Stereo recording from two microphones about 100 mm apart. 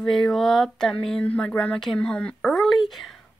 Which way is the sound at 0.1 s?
Centre (ahead or behind).